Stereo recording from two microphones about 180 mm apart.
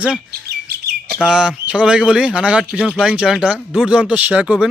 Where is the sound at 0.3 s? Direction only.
60° right (ahead or behind).